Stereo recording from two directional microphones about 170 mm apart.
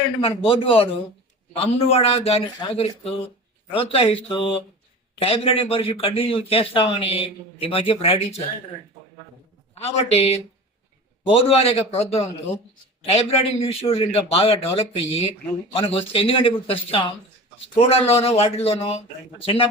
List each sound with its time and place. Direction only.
0.2 s a man's voice: 30° left (ahead or behind)
9.8 s a man's voice: 40° left (ahead or behind)